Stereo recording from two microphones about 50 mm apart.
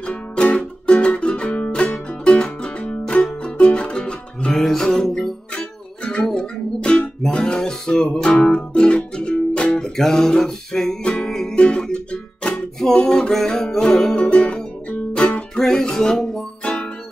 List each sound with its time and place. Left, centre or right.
0.0 s music: left
4.6 s music: centre
5.5 s music: left
9.8 s music: centre
12.7 s music: centre
15.6 s music: centre
16.6 s music: left